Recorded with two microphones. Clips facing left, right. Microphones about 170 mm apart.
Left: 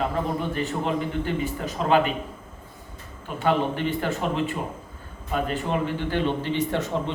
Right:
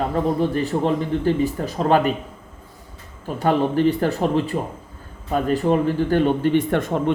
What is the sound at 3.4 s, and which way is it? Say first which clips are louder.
A man's voice: right 5 dB; 40° right (ahead or behind).